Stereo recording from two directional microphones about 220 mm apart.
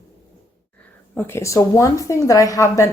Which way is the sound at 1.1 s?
10° left (ahead or behind).